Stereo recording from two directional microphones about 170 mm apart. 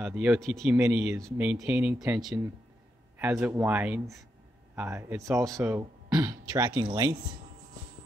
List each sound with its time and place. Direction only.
0.0 s speech: 10° right (ahead or behind)
0.7 s speech: 10° right (ahead or behind)